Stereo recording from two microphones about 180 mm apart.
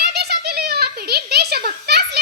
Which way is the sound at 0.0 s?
65° right (ahead or behind).